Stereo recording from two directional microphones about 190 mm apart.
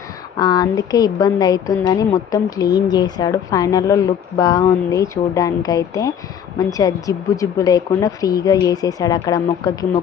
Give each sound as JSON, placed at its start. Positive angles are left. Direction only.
{"t": 0.3, "sound": "a woman's voice", "side_deg": 20}